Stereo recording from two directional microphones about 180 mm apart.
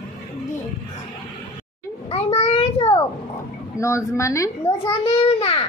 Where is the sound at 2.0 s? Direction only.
35° left (ahead or behind).